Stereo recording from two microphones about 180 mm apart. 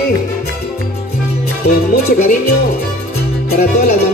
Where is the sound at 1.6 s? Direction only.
60° left (ahead or behind).